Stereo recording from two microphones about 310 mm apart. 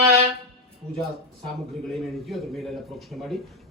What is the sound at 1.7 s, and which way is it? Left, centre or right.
A man's voice, centre.